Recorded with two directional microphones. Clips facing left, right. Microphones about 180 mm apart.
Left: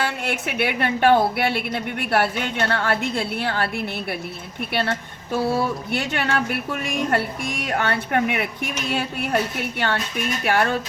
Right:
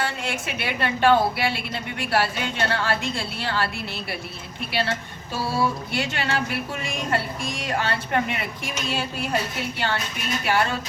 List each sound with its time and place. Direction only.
0.0 s speech: 60° left (ahead or behind)